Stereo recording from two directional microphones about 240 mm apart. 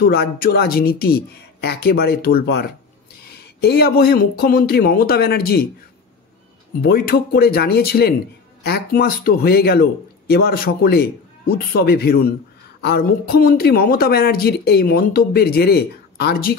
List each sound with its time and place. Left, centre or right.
0.0 s speech: left
6.8 s speech: left